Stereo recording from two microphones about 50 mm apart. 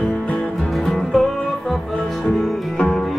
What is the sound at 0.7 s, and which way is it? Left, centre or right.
Music, centre.